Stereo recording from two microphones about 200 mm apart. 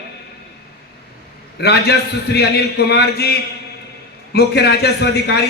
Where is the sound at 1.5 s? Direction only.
55° left (ahead or behind).